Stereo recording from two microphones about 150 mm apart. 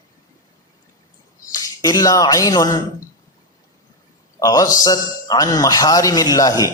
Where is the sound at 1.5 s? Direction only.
25° left (ahead or behind).